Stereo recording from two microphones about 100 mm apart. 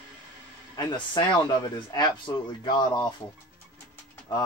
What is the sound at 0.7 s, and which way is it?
Speech, 45° left (ahead or behind).